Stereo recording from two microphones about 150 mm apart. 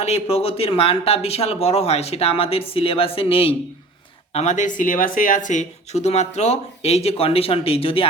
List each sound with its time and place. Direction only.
0.0 s speech: 45° left (ahead or behind)